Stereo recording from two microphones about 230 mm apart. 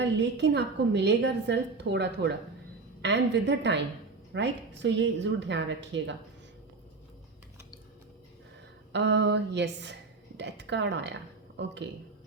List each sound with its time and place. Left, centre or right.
0.0 s a woman's voice: right
8.9 s a woman's voice: right